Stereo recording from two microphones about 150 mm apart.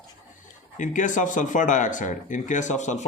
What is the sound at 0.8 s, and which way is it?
Speech, 55° left (ahead or behind).